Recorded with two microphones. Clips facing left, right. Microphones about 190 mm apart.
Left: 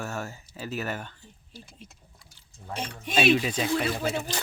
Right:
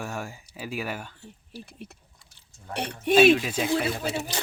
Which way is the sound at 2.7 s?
70° right (ahead or behind).